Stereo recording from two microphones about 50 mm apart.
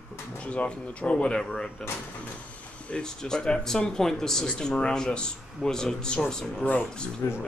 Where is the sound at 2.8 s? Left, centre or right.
Centre.